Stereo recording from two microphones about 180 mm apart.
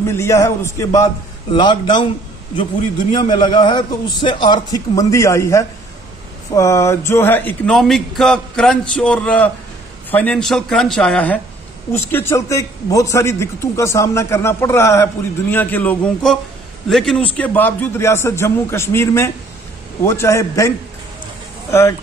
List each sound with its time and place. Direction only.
0.0 s a man's voice: 15° left (ahead or behind)
3.3 s a man's voice: 25° left (ahead or behind)